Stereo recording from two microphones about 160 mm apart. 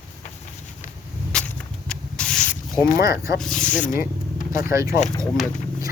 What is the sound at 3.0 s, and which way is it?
Speech, 20° right (ahead or behind).